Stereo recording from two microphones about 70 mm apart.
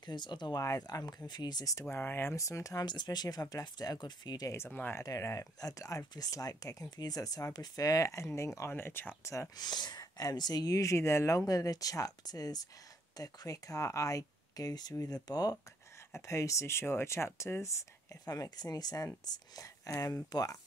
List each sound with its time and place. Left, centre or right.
0.0 s speech: left
0.6 s speech: left
1.9 s speech: left
2.3 s speech: left
2.8 s speech: left
4.6 s speech: left
4.9 s speech: left
9.2 s speech: left
9.6 s speech: left
16.1 s speech: left
18.2 s speech: left